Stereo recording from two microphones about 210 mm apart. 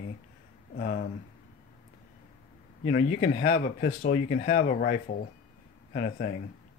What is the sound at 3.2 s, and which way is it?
Speech, 50° left (ahead or behind).